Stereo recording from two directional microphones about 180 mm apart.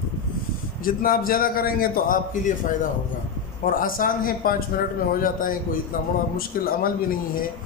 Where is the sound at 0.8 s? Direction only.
50° left (ahead or behind).